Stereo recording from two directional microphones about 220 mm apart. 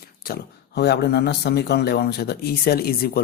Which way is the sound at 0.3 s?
45° left (ahead or behind).